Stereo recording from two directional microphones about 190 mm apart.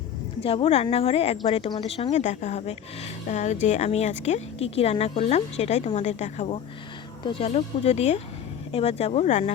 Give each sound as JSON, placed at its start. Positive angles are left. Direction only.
{"t": 0.4, "sound": "speech", "side_deg": 30}